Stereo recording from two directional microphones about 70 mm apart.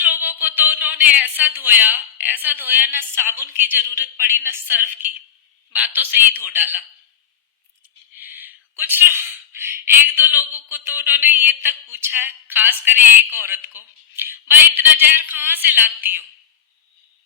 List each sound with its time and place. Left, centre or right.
0.0 s speech: right
3.2 s a woman's voice: right
8.1 s a sound: right
10.5 s speech: right